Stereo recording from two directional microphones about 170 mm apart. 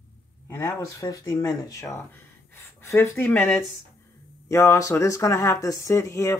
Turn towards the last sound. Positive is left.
turn(degrees=15)  # may be behind; listen again after turning